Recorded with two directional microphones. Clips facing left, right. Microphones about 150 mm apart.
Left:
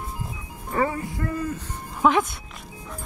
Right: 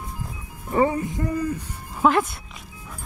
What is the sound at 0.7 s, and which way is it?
Speech, 20° right (ahead or behind).